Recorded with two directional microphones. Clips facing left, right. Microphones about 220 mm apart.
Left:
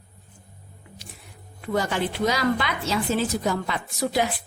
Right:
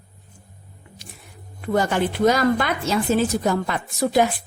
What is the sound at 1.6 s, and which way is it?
Speech, 50° right (ahead or behind).